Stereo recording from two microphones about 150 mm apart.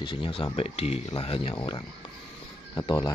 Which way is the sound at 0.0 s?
35° left (ahead or behind).